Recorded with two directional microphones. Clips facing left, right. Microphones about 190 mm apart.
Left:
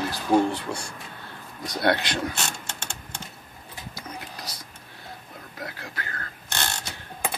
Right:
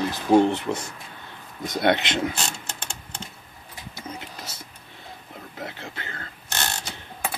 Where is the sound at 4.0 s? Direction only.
25° right (ahead or behind).